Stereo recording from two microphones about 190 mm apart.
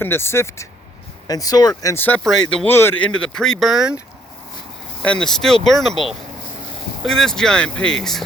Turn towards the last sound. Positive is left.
turn(degrees=5)  # may be behind; listen again after turning